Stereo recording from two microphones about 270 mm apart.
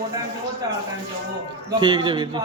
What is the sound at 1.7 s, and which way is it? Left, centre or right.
Speech, centre.